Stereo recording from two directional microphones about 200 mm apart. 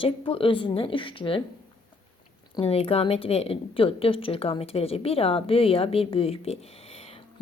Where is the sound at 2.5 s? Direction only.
30° left (ahead or behind).